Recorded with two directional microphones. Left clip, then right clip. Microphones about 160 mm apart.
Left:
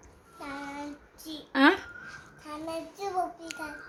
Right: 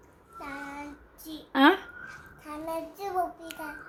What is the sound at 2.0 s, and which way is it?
Child singing, centre (ahead or behind).